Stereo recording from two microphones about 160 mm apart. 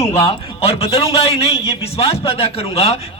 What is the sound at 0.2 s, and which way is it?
A man's voice, 35° left (ahead or behind).